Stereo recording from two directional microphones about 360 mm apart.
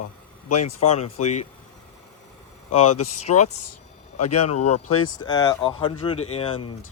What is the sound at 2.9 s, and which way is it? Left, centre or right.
Speech, left.